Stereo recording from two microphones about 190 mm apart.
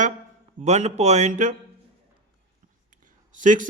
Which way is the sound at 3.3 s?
40° right (ahead or behind).